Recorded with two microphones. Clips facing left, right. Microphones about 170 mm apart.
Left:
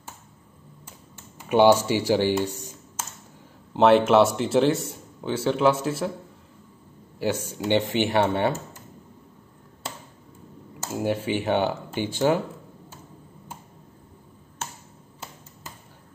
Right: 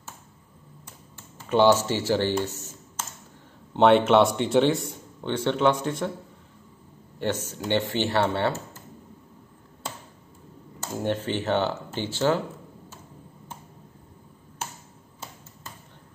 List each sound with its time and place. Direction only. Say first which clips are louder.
1.4 s speech: left 2 dB; 15° left (ahead or behind)
3.7 s a man's voice: left 1 dB; centre (ahead or behind)
7.2 s speech: left 2 dB; 10° left (ahead or behind)
11.0 s speech: left 2 dB; 10° left (ahead or behind)